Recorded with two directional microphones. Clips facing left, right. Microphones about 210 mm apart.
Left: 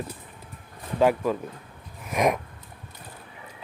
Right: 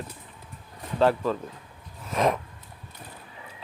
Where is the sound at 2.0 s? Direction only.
15° left (ahead or behind).